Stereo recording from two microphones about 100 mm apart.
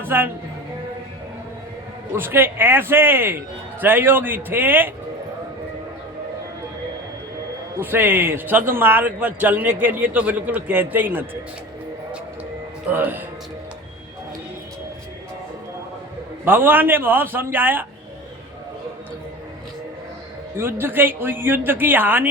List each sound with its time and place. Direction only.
0.0 s a woman's voice: 20° right (ahead or behind)
2.1 s speech: 20° right (ahead or behind)
7.8 s speech: 20° right (ahead or behind)
12.9 s speech: 20° right (ahead or behind)
16.5 s speech: 20° right (ahead or behind)
20.6 s speech: 20° right (ahead or behind)